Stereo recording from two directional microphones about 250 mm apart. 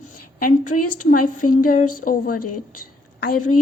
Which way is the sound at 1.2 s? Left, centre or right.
Left.